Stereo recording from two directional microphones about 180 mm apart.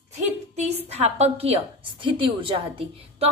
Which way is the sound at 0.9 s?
35° right (ahead or behind).